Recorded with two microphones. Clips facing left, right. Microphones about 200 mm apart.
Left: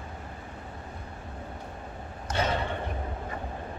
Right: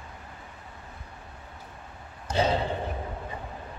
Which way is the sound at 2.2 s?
30° right (ahead or behind).